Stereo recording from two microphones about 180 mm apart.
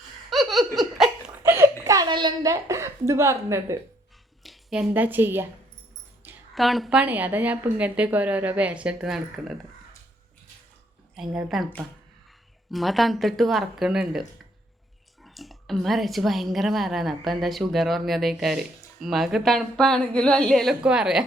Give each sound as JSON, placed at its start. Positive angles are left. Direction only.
{"t": 0.3, "sound": "laughter", "side_deg": 0}
{"t": 1.5, "sound": "a sound", "side_deg": -15}
{"t": 1.8, "sound": "a woman's voice", "side_deg": -20}
{"t": 4.4, "sound": "a woman's voice", "side_deg": -5}
{"t": 6.5, "sound": "a woman's voice", "side_deg": 0}
{"t": 11.1, "sound": "a woman's voice", "side_deg": -5}
{"t": 12.7, "sound": "a woman's voice", "side_deg": 0}